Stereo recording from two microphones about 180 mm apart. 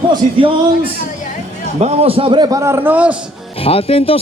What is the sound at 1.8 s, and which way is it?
A man's voice, 35° right (ahead or behind).